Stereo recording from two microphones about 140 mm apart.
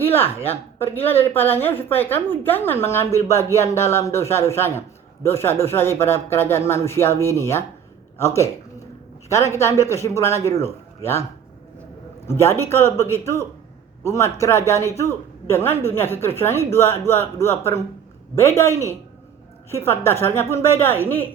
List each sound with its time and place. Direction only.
1.2 s a woman's voice: 15° left (ahead or behind)
12.3 s speech: 15° left (ahead or behind)